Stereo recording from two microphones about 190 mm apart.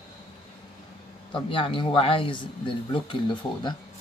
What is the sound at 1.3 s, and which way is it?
Speech, 25° left (ahead or behind).